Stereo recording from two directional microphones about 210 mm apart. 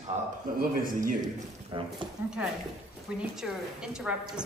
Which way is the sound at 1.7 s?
25° right (ahead or behind).